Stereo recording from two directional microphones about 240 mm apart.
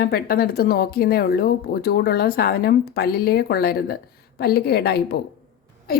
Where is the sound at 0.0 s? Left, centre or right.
Left.